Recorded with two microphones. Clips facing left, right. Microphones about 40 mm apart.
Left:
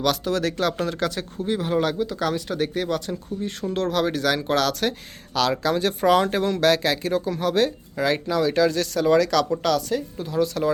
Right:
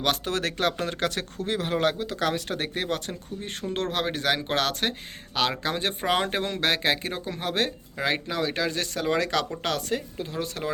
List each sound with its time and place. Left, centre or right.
0.3 s a woman's voice: right
1.5 s speech: right
7.9 s a woman's voice: right
10.3 s speech: right